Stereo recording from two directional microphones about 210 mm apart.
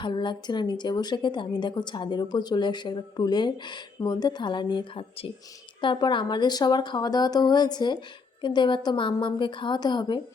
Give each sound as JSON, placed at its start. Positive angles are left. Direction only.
{"t": 0.0, "sound": "a woman's voice", "side_deg": 20}